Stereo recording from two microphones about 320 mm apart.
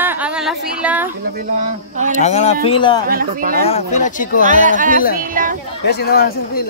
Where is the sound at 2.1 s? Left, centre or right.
Left.